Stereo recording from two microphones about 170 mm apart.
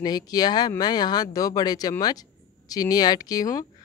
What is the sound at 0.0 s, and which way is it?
Speech, 25° left (ahead or behind).